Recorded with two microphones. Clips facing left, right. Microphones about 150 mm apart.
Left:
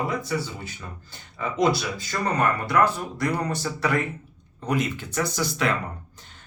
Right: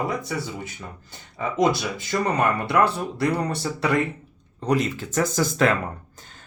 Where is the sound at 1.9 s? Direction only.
20° right (ahead or behind).